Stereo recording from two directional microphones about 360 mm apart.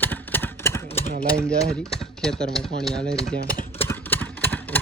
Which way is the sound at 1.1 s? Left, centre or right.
Centre.